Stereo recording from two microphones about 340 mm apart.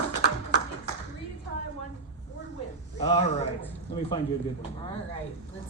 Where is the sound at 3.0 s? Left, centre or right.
Centre.